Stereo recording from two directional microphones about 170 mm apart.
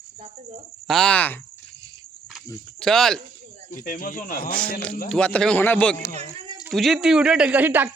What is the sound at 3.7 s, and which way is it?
Speech, 55° left (ahead or behind).